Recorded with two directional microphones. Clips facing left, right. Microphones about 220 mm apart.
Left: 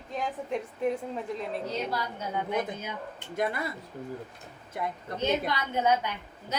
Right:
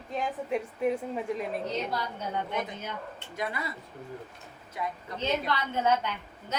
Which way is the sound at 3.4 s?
50° left (ahead or behind).